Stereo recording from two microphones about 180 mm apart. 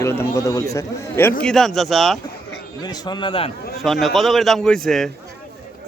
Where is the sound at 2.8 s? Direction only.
25° left (ahead or behind).